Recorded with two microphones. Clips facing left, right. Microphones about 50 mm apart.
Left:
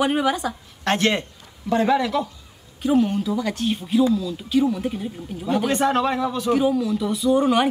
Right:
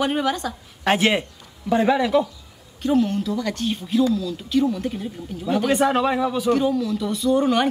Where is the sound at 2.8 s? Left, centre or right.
Centre.